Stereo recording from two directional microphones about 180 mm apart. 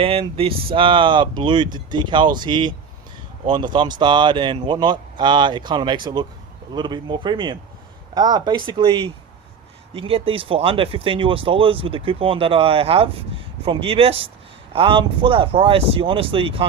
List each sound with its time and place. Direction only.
0.0 s speech: 30° right (ahead or behind)